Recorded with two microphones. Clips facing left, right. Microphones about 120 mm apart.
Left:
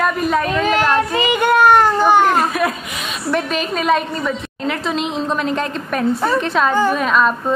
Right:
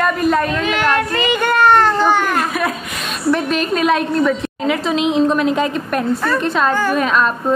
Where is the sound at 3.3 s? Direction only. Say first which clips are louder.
Right 2 dB; centre (ahead or behind).